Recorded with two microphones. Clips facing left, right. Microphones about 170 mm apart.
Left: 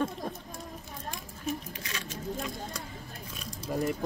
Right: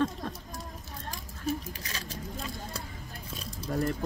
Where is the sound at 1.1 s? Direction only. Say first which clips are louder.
Right 3 dB; 35° right (ahead or behind).